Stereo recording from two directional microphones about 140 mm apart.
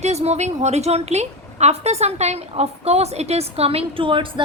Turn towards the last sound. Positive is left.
turn(degrees=-35)  # may be behind; listen again after turning